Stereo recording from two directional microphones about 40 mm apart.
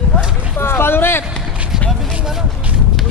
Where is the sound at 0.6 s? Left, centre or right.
Left.